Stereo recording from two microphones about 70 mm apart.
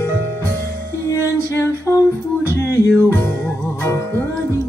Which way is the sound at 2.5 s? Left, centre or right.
Left.